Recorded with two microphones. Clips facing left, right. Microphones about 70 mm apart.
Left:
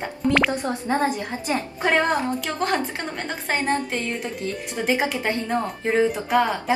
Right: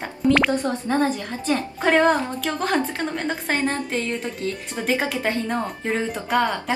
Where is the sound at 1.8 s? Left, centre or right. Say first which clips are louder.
Right 3 dB; centre.